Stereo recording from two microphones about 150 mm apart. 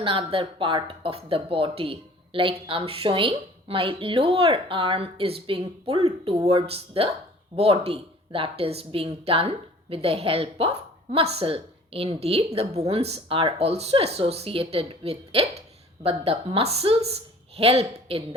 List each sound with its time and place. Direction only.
0.0 s speech: 35° right (ahead or behind)